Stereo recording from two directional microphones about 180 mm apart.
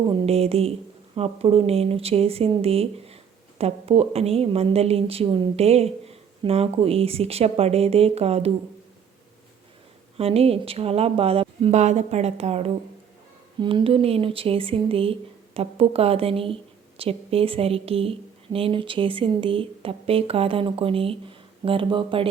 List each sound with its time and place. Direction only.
0.0 s a woman's voice: 30° right (ahead or behind)
10.2 s a woman's voice: 35° right (ahead or behind)